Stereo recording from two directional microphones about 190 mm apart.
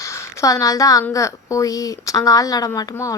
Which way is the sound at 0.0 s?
15° left (ahead or behind).